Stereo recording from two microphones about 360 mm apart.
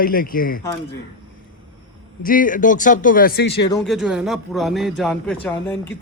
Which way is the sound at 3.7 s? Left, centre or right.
Centre.